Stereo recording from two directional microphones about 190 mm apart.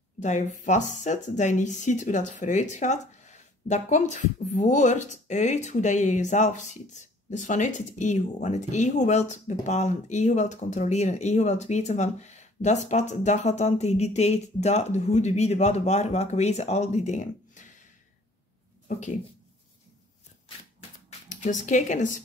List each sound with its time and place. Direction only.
0.2 s speech: 40° left (ahead or behind)
18.9 s speech: 40° left (ahead or behind)
21.3 s speech: 40° left (ahead or behind)